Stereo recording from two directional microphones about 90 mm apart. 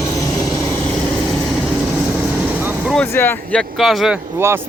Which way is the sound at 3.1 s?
25° left (ahead or behind).